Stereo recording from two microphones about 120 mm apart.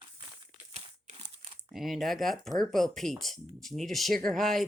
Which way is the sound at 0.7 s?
70° right (ahead or behind).